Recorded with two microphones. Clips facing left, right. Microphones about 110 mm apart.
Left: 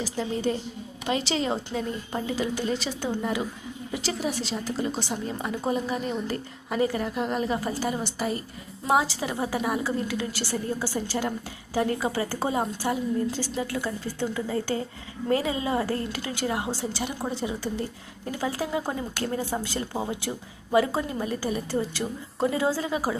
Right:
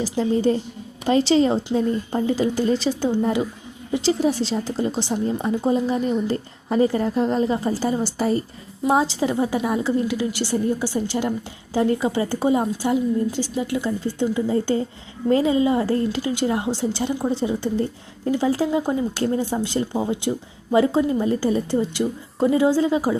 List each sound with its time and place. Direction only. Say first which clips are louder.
0.0 s a woman's voice: right 8 dB; 35° right (ahead or behind)